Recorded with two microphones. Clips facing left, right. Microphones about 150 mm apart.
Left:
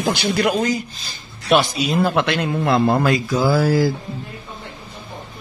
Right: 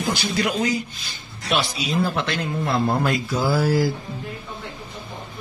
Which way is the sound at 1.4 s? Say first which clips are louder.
Left 7 dB; 60° left (ahead or behind).